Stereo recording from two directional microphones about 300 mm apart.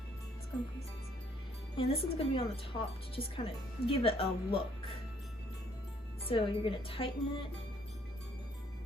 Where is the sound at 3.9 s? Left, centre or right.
Centre.